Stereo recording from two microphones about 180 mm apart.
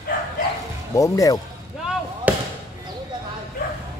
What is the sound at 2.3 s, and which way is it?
Basketball bounce, 10° right (ahead or behind).